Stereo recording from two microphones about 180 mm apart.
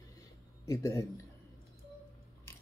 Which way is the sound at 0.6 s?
15° left (ahead or behind).